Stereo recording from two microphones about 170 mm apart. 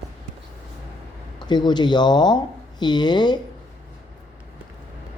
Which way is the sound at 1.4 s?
25° left (ahead or behind).